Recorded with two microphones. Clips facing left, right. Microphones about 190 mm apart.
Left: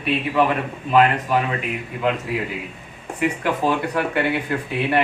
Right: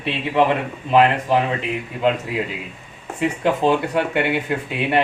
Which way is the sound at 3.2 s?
25° right (ahead or behind).